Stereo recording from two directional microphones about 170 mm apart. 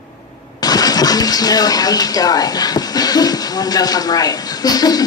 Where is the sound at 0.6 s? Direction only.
20° left (ahead or behind).